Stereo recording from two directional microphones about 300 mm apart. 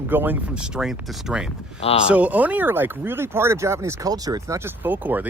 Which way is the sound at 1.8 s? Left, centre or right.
Centre.